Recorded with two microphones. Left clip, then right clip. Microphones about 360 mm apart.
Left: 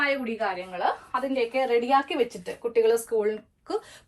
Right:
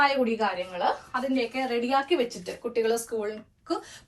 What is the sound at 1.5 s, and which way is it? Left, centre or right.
A woman's voice, centre.